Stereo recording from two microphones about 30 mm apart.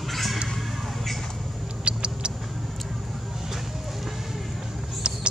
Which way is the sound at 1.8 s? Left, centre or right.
Right.